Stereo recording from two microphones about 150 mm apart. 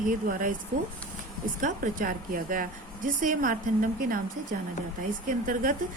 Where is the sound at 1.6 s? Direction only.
65° right (ahead or behind).